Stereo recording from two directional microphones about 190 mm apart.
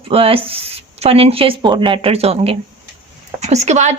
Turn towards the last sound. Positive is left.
turn(degrees=-35)  # may be behind; listen again after turning